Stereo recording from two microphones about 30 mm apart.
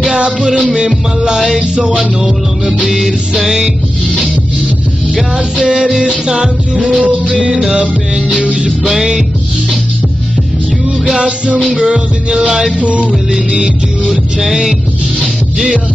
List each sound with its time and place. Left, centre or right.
0.0 s music: right
1.6 s music: right
2.0 s music: right
5.9 s music: right
6.2 s music: right
6.8 s music: right
8.8 s music: centre
11.1 s music: right
12.7 s music: right
14.5 s music: centre